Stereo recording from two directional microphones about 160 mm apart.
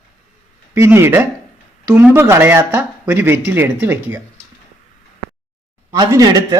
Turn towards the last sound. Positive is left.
turn(degrees=-25)  # may be behind; listen again after turning